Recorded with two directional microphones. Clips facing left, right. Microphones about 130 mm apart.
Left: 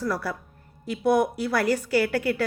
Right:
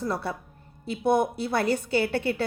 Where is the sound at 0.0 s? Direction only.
25° right (ahead or behind).